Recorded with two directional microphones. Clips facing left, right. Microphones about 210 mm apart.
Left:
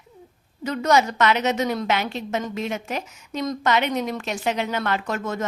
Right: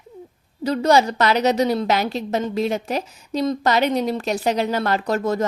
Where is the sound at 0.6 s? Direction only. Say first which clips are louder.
Right 3 dB; 35° right (ahead or behind).